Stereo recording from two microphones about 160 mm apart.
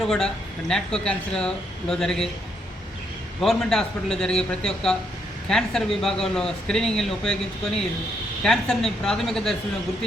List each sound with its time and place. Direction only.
0.0 s speech: 5° left (ahead or behind)
3.4 s speech: centre (ahead or behind)